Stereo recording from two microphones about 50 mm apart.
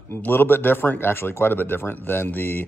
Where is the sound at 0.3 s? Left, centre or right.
Left.